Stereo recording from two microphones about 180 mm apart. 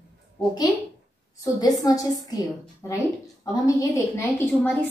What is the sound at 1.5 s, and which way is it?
A woman's voice, 20° left (ahead or behind).